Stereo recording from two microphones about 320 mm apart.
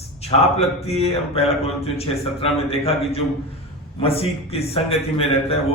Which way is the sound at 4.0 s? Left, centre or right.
Centre.